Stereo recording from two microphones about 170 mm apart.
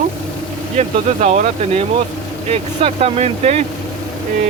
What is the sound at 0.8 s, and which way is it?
Speech, 40° right (ahead or behind).